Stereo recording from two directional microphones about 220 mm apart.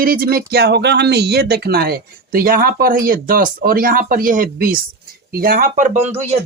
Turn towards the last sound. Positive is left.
turn(degrees=-30)  # may be behind; listen again after turning